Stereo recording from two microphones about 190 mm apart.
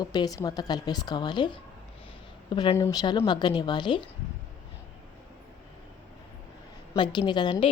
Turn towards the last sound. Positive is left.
turn(degrees=25)  # may be behind; listen again after turning